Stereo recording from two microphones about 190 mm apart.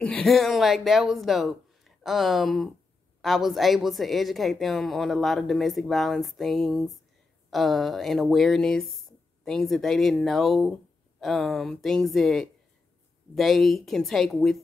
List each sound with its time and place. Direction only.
0.0 s a woman's voice: 5° left (ahead or behind)